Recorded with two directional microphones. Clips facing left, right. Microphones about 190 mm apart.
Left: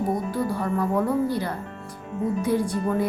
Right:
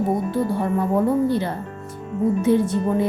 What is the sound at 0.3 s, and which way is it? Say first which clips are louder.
Speech: right 4 dB; 25° right (ahead or behind).